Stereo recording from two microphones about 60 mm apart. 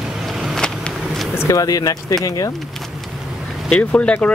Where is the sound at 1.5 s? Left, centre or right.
Left.